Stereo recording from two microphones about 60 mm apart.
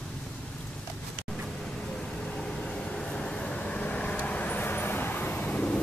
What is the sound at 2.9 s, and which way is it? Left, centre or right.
Vehicle, centre.